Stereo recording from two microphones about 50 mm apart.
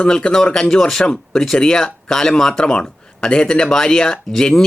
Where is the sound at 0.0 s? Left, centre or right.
Centre.